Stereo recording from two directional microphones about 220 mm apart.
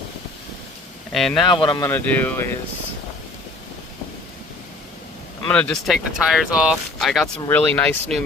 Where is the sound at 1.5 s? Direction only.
20° left (ahead or behind).